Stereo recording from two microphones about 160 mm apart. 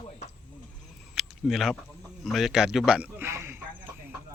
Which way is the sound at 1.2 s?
Centre (ahead or behind).